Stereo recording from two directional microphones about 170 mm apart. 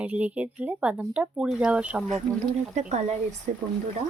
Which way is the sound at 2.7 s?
40° right (ahead or behind).